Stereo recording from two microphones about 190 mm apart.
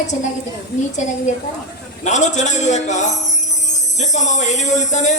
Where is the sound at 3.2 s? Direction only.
40° left (ahead or behind).